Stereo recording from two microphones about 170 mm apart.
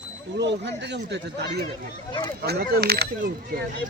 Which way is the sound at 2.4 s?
70° right (ahead or behind).